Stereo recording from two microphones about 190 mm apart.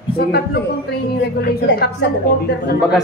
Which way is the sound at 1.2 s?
55° left (ahead or behind).